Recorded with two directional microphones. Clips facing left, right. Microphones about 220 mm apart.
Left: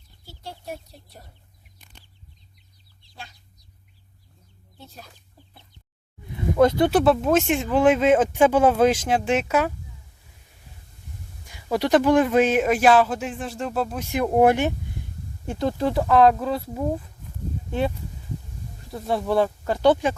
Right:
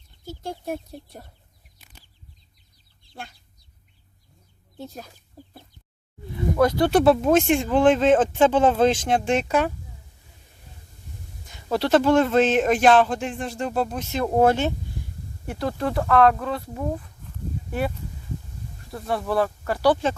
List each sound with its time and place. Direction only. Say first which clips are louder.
0.6 s speech: right 6 dB; 50° right (ahead or behind)
1.8 s bird flight: even; 5° right (ahead or behind)
5.4 s chicken: right 15 dB; 40° right (ahead or behind)
6.6 s speech: left 2 dB; 20° left (ahead or behind)
6.9 s speech: right 1 dB; centre (ahead or behind)
11.4 s speech: even; 10° left (ahead or behind)
15.6 s speech: left 2 dB; centre (ahead or behind)
18.9 s speech: left 2 dB; centre (ahead or behind)
19.6 s speech: left 1 dB; 20° left (ahead or behind)